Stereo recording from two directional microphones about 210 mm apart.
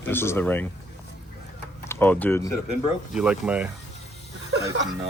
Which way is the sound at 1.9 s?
10° left (ahead or behind).